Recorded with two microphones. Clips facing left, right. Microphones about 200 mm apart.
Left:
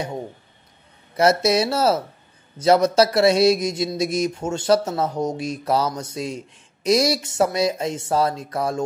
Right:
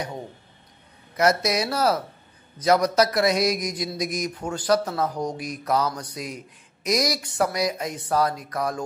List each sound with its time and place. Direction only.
1.1 s speech: 30° left (ahead or behind)